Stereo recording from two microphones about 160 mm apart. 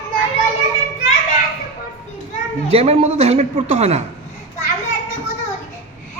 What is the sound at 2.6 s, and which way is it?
A woman's voice, 40° right (ahead or behind).